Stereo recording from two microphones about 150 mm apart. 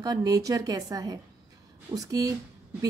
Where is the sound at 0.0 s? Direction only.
25° right (ahead or behind).